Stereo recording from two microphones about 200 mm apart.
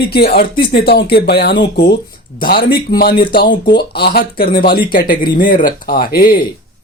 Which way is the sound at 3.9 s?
55° left (ahead or behind).